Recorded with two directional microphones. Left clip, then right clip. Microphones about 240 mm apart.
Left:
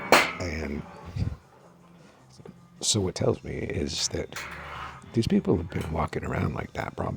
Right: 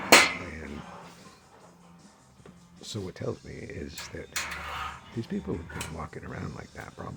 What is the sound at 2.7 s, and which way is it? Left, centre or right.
Speech, left.